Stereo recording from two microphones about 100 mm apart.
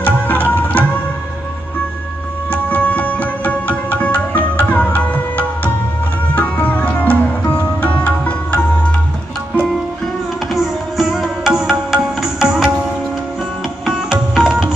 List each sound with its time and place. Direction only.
0.0 s music: 15° left (ahead or behind)
2.5 s music: 15° left (ahead or behind)
10.5 s music: 5° right (ahead or behind)
13.8 s music: 5° right (ahead or behind)
14.3 s tabla: 10° right (ahead or behind)